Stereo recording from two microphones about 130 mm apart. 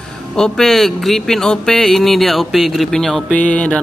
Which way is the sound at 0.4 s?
5° left (ahead or behind).